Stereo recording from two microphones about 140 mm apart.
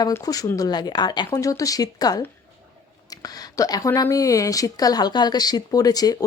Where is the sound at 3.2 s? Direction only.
25° left (ahead or behind).